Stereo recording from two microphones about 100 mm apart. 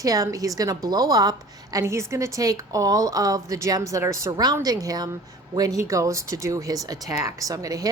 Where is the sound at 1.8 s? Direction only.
30° right (ahead or behind).